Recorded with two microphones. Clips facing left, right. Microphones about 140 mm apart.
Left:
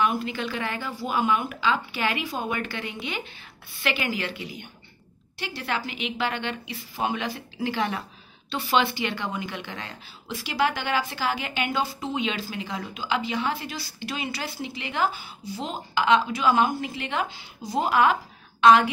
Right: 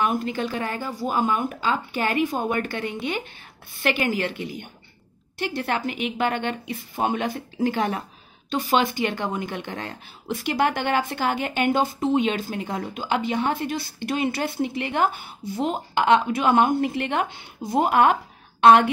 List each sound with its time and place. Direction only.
0.0 s a woman's voice: 45° right (ahead or behind)